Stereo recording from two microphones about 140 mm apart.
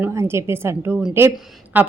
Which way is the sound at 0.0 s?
20° right (ahead or behind).